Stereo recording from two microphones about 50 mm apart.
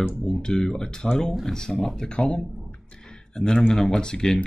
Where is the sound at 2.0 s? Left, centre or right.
Centre.